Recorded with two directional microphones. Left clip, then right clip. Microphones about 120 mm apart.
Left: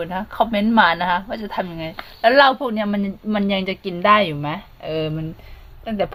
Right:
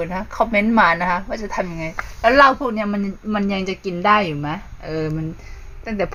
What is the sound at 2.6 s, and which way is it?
Speech, 35° left (ahead or behind).